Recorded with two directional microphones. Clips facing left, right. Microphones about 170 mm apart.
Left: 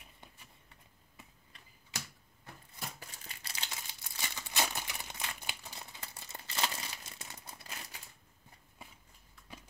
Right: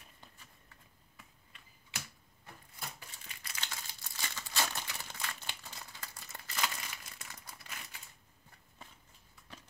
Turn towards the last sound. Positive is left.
turn(degrees=25)  # may be behind; listen again after turning